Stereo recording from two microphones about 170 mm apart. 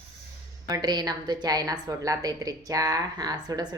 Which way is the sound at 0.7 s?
25° right (ahead or behind).